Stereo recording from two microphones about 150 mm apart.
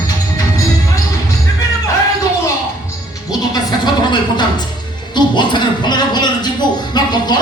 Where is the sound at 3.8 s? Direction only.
30° left (ahead or behind).